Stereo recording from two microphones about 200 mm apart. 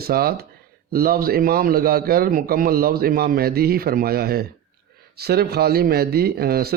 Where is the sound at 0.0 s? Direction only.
50° right (ahead or behind).